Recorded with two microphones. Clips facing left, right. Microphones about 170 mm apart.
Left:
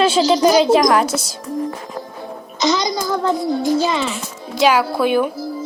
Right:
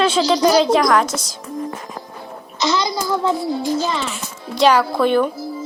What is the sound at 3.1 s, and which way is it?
Music, 5° right (ahead or behind).